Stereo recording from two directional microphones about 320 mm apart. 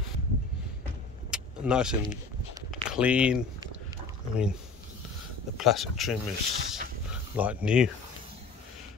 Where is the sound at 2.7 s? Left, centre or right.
Centre.